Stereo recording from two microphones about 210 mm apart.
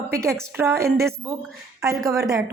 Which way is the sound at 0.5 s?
10° right (ahead or behind).